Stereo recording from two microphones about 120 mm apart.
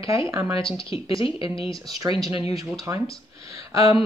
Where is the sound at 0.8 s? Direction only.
50° left (ahead or behind).